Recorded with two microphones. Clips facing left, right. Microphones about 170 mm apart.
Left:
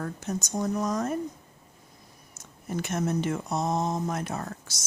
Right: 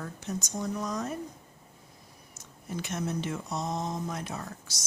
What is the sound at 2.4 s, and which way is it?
Speech, 50° left (ahead or behind).